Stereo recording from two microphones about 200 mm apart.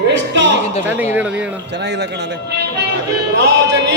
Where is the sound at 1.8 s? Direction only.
55° right (ahead or behind).